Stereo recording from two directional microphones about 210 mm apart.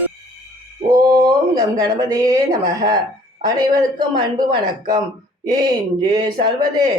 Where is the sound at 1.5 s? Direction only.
20° right (ahead or behind).